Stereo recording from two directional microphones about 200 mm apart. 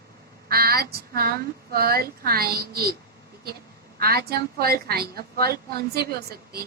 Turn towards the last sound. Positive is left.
turn(degrees=-50)  # may be behind; listen again after turning